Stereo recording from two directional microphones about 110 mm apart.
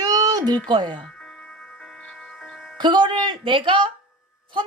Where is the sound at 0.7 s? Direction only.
40° right (ahead or behind).